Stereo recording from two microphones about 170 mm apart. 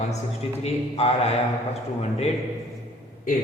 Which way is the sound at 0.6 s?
35° left (ahead or behind).